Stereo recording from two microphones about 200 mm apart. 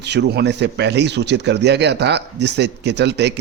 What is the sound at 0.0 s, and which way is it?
Speech, 55° right (ahead or behind).